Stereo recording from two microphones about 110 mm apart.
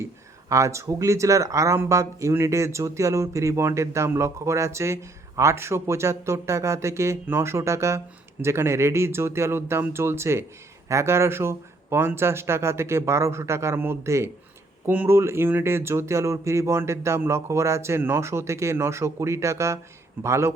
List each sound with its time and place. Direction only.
0.0 s speech: 30° right (ahead or behind)